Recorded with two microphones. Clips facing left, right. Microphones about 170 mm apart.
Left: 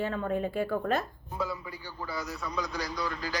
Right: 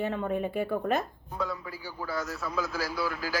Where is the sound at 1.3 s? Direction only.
Centre (ahead or behind).